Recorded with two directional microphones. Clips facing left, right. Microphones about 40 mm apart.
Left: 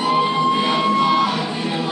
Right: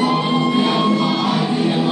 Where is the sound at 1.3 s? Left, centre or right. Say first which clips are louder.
Right 4 dB; centre.